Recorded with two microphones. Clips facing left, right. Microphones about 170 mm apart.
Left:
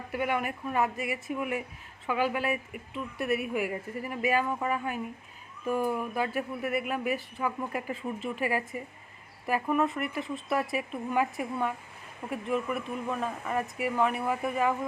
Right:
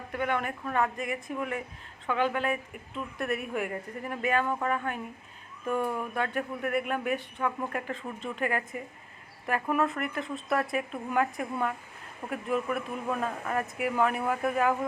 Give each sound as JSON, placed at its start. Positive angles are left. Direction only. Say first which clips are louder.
{"t": 0.1, "sound": "a woman's voice", "louder": "even", "side_deg": 10}